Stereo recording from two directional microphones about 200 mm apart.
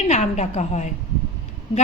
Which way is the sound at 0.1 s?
35° left (ahead or behind).